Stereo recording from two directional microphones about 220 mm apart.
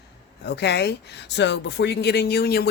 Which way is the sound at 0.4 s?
50° left (ahead or behind).